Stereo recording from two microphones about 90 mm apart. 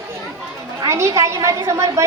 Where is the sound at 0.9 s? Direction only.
35° right (ahead or behind).